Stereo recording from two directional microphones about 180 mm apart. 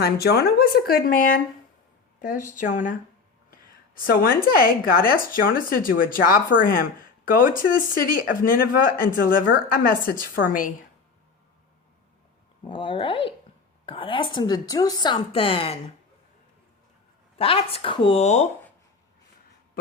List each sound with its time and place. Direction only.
0.0 s speech: 60° left (ahead or behind)
12.6 s a woman's voice: 25° left (ahead or behind)
17.3 s a woman's voice: 30° left (ahead or behind)